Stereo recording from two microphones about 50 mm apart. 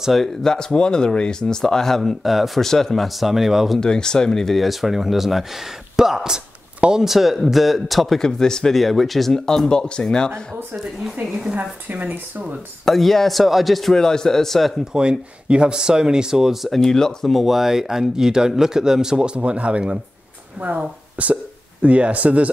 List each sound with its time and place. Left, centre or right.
0.0 s speech: centre
0.4 s speech: centre
3.8 s speech: centre
4.6 s a man's voice: centre
8.2 s speech: centre
8.7 s speech: centre
11.2 s speech: centre
11.5 s speech: right
12.8 s a man's voice: centre
14.9 s speech: centre